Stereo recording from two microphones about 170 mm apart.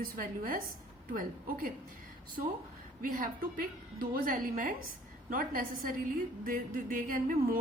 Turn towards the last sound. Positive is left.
turn(degrees=-55)  # may be behind; listen again after turning